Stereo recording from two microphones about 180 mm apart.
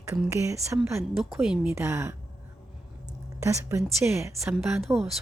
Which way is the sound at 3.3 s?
15° right (ahead or behind).